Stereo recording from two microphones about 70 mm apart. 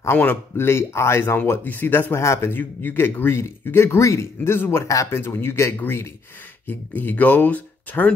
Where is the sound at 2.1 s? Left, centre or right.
Left.